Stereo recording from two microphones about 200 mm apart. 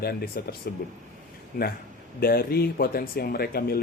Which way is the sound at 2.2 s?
50° left (ahead or behind).